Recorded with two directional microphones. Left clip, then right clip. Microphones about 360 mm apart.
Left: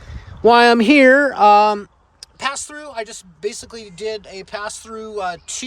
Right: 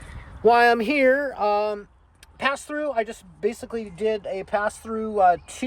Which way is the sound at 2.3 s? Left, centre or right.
Centre.